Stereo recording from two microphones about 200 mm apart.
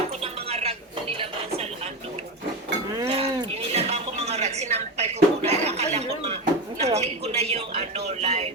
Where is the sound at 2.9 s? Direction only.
25° right (ahead or behind).